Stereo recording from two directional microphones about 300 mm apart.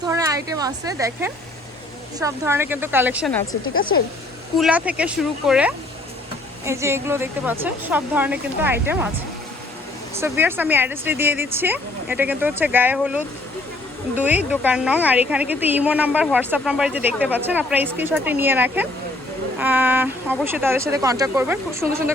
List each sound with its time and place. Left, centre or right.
0.1 s speech: centre
4.5 s a woman's voice: centre
10.2 s a woman's voice: centre